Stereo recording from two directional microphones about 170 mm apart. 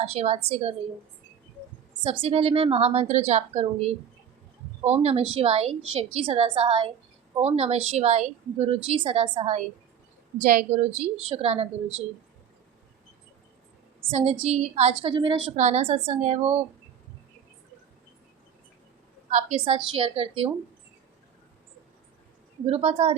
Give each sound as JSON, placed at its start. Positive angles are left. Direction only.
{"t": 0.0, "sound": "a woman's voice", "side_deg": -40}
{"t": 2.0, "sound": "a woman's voice", "side_deg": -35}
{"t": 10.3, "sound": "a woman's voice", "side_deg": -50}
{"t": 11.2, "sound": "a woman's voice", "side_deg": -35}
{"t": 14.1, "sound": "a woman's voice", "side_deg": -35}
{"t": 15.4, "sound": "a woman's voice", "side_deg": -40}
{"t": 19.3, "sound": "a woman's voice", "side_deg": -40}
{"t": 22.6, "sound": "a woman's voice", "side_deg": -35}